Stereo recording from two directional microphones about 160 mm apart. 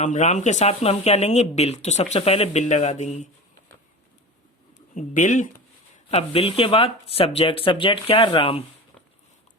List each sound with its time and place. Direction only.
0.0 s speech: 50° left (ahead or behind)
4.9 s speech: 50° left (ahead or behind)
6.1 s speech: 40° left (ahead or behind)